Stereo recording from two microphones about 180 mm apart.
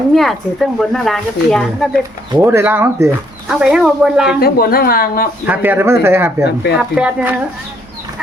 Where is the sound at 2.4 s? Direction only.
15° right (ahead or behind).